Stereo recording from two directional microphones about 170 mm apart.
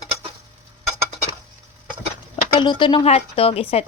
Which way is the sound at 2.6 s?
25° left (ahead or behind).